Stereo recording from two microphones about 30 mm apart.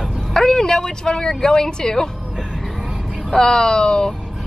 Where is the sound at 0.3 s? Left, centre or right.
Centre.